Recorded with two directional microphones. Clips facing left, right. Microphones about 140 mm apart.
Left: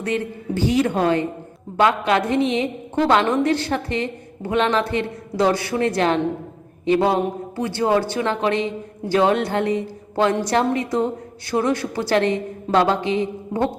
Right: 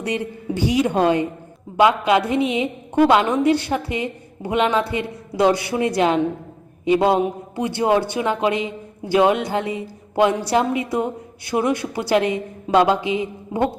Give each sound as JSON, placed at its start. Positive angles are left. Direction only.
{"t": 0.0, "sound": "a woman's voice", "side_deg": -15}